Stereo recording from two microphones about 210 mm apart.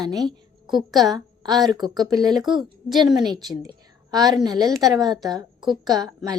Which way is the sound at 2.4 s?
Centre (ahead or behind).